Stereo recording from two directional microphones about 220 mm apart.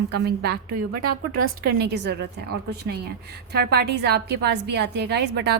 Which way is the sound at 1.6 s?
45° right (ahead or behind).